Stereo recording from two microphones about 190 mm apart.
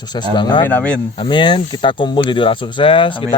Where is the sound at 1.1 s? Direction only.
25° left (ahead or behind).